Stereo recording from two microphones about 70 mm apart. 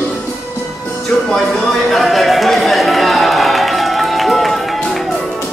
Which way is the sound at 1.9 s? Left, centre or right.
Centre.